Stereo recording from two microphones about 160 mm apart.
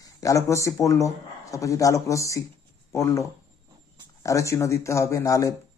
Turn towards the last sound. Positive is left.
turn(degrees=20)  # may be behind; listen again after turning